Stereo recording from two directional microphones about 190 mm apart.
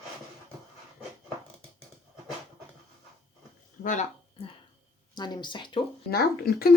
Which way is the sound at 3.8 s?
40° left (ahead or behind).